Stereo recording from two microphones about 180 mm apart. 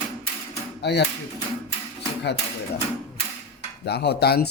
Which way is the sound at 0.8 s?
70° left (ahead or behind).